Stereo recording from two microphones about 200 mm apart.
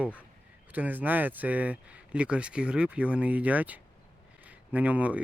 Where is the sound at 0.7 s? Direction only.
10° right (ahead or behind).